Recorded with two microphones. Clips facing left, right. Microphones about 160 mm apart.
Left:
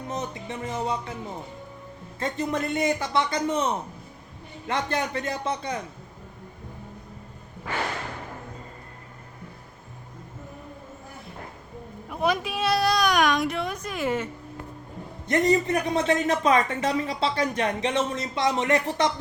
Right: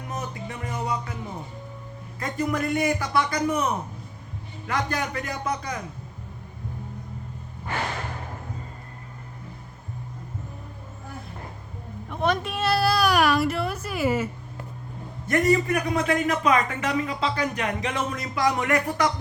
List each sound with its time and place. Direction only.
0.1 s a woman's voice: 25° left (ahead or behind)
2.1 s a woman's voice: 25° left (ahead or behind)
12.0 s speech: 5° left (ahead or behind)
15.3 s a woman's voice: 20° left (ahead or behind)